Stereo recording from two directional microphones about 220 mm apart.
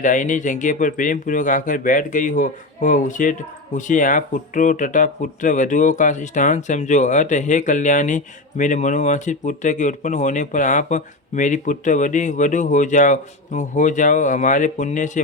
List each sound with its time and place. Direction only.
0.0 s speech: 35° left (ahead or behind)